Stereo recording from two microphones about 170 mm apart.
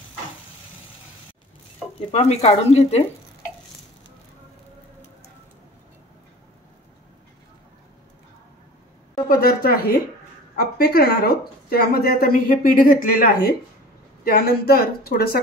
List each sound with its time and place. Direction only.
2.0 s speech: 40° left (ahead or behind)
9.1 s a sound: 60° left (ahead or behind)
10.5 s speech: 60° left (ahead or behind)